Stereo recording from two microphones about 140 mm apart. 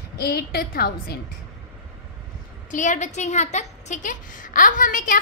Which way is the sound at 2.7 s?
65° left (ahead or behind).